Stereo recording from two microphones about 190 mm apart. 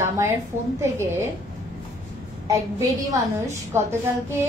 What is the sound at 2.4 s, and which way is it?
A woman's voice, 15° right (ahead or behind).